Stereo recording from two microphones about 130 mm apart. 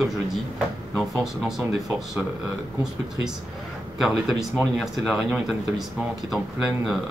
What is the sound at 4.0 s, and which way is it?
Speech, centre (ahead or behind).